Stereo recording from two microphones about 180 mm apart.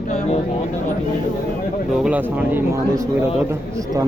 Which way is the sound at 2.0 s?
10° right (ahead or behind).